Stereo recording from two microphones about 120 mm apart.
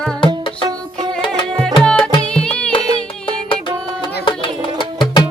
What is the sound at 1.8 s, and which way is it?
Tabla, 10° left (ahead or behind).